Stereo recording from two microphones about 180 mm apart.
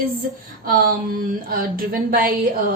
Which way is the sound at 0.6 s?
55° right (ahead or behind).